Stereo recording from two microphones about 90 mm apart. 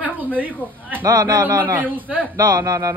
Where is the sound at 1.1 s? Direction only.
45° right (ahead or behind).